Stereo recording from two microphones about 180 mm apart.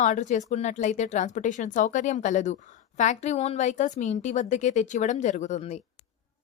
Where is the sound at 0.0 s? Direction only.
45° left (ahead or behind).